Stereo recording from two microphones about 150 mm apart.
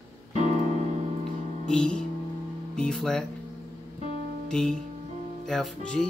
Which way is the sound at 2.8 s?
5° left (ahead or behind).